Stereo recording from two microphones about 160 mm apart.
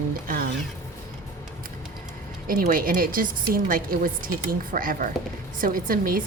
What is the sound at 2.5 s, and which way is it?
A woman's voice, 60° right (ahead or behind).